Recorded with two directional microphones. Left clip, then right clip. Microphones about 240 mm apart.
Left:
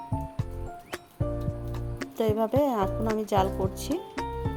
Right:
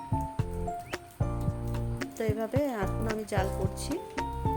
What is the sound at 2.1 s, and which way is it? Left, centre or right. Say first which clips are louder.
Speech: left 6 dB; left.